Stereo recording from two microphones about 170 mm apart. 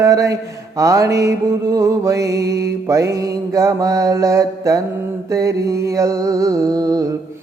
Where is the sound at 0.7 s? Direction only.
20° right (ahead or behind).